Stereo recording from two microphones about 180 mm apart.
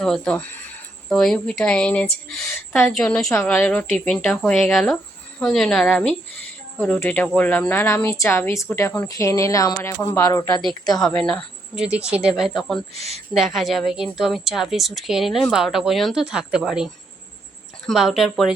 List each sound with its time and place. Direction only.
0.0 s a woman's voice: 5° left (ahead or behind); by 10.6 s 20° left (ahead or behind)
11.0 s a woman's voice: 5° left (ahead or behind)
13.0 s a woman's voice: 35° right (ahead or behind)
13.3 s a woman's voice: centre (ahead or behind)